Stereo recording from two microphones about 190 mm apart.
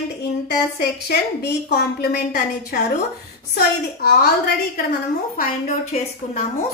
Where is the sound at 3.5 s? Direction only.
55° left (ahead or behind).